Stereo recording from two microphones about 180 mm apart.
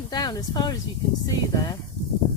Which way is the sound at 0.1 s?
20° left (ahead or behind).